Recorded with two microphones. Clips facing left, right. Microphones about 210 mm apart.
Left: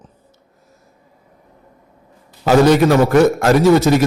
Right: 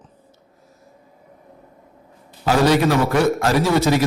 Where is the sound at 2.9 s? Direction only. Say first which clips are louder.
Left 6 dB; 45° left (ahead or behind).